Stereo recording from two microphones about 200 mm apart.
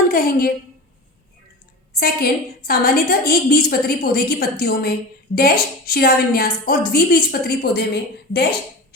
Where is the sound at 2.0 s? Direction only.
50° left (ahead or behind).